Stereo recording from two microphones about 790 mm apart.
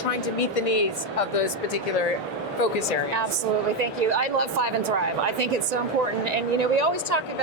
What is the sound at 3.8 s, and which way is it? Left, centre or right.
A woman's voice, right.